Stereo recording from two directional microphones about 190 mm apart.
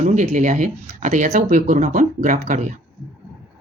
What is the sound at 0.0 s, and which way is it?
Speech, 40° right (ahead or behind).